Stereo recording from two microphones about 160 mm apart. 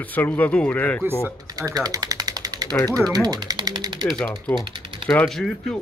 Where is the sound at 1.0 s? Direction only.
15° right (ahead or behind).